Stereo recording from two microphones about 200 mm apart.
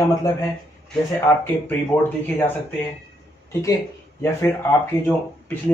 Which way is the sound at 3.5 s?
15° left (ahead or behind).